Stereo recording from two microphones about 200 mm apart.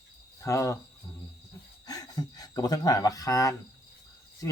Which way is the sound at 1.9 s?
20° left (ahead or behind).